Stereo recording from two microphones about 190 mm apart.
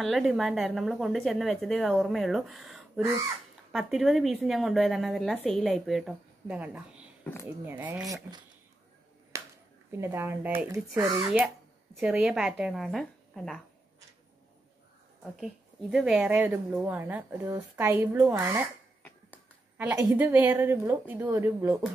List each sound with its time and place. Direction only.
0.0 s a woman's voice: centre (ahead or behind)
9.3 s a sound: 15° right (ahead or behind)
9.9 s speech: 10° right (ahead or behind)
12.0 s a woman's voice: centre (ahead or behind)
15.4 s speech: centre (ahead or behind)
19.8 s speech: 10° right (ahead or behind)